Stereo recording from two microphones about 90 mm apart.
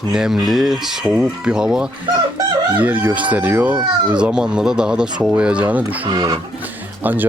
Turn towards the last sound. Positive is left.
turn(degrees=-20)  # may be behind; listen again after turning